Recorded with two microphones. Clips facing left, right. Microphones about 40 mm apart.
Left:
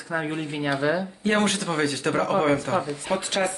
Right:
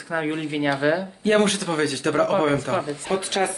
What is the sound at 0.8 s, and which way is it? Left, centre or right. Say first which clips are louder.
Speech: right 2 dB; right.